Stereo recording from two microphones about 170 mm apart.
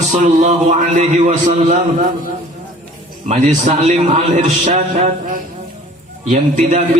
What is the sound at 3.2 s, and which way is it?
A man's voice, 40° right (ahead or behind).